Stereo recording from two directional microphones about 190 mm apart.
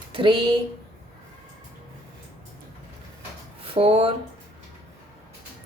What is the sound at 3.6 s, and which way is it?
Speech, 30° right (ahead or behind).